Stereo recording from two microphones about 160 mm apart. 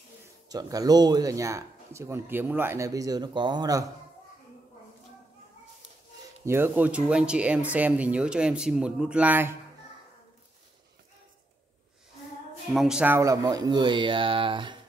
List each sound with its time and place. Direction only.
0.5 s speech: 20° right (ahead or behind)
6.4 s speech: 15° right (ahead or behind)
12.6 s speech: centre (ahead or behind); by 14.8 s 30° right (ahead or behind)